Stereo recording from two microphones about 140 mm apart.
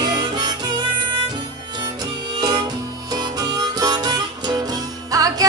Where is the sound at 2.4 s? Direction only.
30° right (ahead or behind).